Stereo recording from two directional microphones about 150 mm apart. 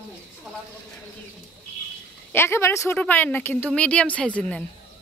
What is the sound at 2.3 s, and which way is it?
Speech, 15° left (ahead or behind).